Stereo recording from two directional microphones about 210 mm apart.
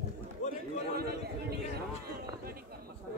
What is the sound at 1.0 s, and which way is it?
Chatter, 50° right (ahead or behind).